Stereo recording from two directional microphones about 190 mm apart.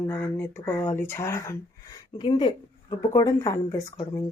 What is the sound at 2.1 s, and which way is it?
Speech, 25° left (ahead or behind).